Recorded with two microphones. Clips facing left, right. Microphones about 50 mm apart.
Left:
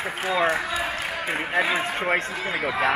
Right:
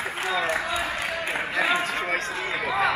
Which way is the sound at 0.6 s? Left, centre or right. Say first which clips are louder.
Even; centre.